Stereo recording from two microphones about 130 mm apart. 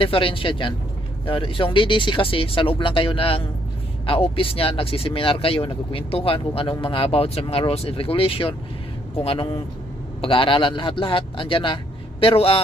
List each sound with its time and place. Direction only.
0.0 s a man's voice: 45° left (ahead or behind)